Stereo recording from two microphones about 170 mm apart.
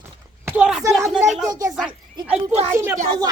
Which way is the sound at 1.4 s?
20° right (ahead or behind).